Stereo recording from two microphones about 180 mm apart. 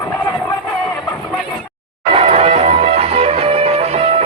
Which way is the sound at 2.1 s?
35° right (ahead or behind).